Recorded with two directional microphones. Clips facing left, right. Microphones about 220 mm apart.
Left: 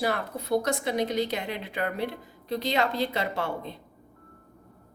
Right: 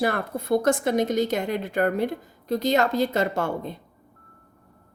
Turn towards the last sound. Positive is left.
turn(degrees=-45)  # may be behind; listen again after turning